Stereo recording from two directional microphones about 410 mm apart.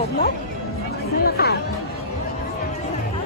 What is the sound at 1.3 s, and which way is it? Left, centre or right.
Speech, left.